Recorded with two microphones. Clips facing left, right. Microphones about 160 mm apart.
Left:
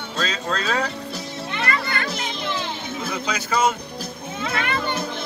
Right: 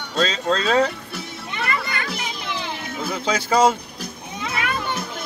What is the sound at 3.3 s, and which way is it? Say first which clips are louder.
Speech: right 5 dB; 30° right (ahead or behind).